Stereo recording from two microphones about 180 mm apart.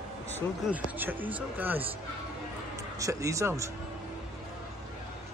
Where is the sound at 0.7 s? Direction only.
10° right (ahead or behind).